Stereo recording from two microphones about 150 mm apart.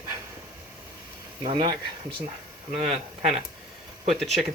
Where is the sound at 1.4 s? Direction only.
30° right (ahead or behind).